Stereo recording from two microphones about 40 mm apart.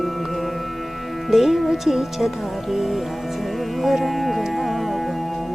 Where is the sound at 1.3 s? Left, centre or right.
Centre.